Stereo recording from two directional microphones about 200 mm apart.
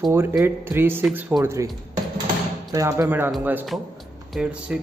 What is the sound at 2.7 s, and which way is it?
Speech, 15° right (ahead or behind).